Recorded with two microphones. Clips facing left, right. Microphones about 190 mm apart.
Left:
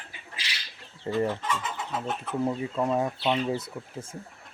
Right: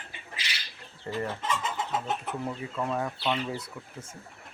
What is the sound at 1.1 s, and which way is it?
Speech, 20° left (ahead or behind).